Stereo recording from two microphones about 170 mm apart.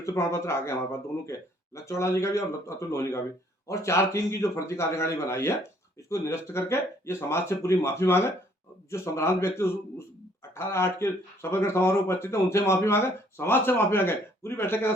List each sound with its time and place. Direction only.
0.0 s speech: 15° left (ahead or behind)